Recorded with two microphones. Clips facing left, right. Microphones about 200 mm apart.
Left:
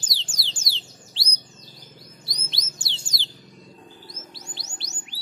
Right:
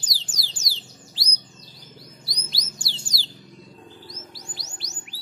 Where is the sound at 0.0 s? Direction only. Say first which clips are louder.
Even; 25° left (ahead or behind).